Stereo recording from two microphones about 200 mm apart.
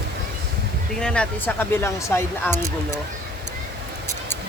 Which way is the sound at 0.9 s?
5° left (ahead or behind).